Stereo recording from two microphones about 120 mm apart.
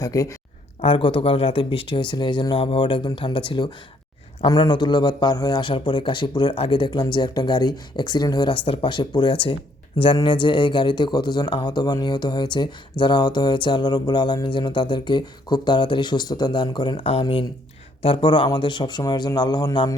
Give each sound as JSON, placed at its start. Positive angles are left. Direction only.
{"t": 0.0, "sound": "speech", "side_deg": 30}
{"t": 0.8, "sound": "speech", "side_deg": 50}